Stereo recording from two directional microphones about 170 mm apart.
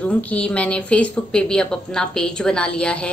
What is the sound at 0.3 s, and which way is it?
A woman's voice, 5° left (ahead or behind).